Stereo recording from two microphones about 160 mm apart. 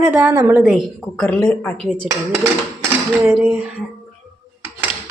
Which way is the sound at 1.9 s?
15° right (ahead or behind).